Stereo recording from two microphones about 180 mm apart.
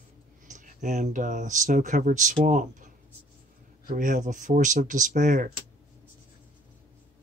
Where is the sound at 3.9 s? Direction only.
45° right (ahead or behind).